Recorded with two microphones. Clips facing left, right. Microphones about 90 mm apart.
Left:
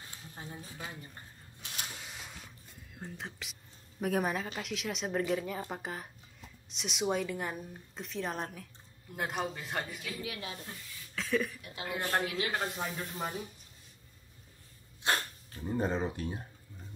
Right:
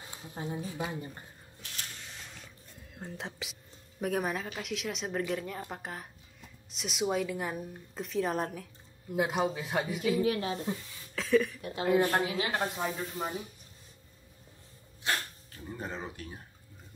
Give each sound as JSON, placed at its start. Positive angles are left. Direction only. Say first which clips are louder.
{"t": 0.0, "sound": "a sound", "louder": "right 7 dB", "side_deg": -20}
{"t": 0.7, "sound": "speech", "louder": "right 8 dB", "side_deg": -20}
{"t": 1.6, "sound": "a sound", "louder": "left 2 dB", "side_deg": 15}
{"t": 4.0, "sound": "a woman's voice", "louder": "even", "side_deg": 0}
{"t": 10.2, "sound": "a woman's voice", "louder": "right 11 dB", "side_deg": -40}
{"t": 11.1, "sound": "speech", "louder": "right 6 dB", "side_deg": 0}
{"t": 11.6, "sound": "a woman's voice", "louder": "right 11 dB", "side_deg": -35}
{"t": 12.3, "sound": "speech", "louder": "right 2 dB", "side_deg": -25}
{"t": 12.5, "sound": "a woman's voice", "louder": "right 3 dB", "side_deg": -5}
{"t": 15.0, "sound": "dog", "louder": "left 1 dB", "side_deg": 30}